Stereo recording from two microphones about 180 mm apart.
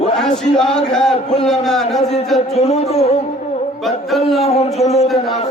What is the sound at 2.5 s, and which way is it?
Music, 35° left (ahead or behind).